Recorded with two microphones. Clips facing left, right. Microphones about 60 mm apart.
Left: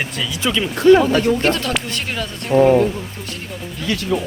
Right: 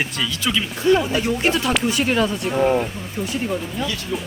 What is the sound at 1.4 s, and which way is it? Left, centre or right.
Speech, centre.